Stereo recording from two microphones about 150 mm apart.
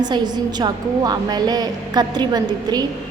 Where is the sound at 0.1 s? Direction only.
30° right (ahead or behind).